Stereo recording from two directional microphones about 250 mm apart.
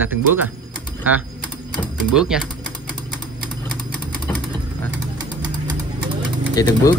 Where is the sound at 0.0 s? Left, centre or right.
Centre.